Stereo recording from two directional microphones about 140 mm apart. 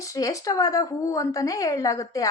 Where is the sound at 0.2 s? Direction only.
25° left (ahead or behind).